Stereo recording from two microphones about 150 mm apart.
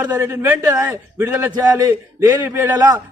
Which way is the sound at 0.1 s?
15° right (ahead or behind).